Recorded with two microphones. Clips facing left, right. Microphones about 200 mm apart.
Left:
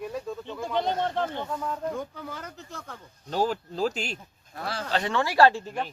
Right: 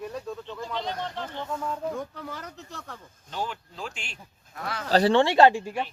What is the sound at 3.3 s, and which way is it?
Speech, 40° left (ahead or behind).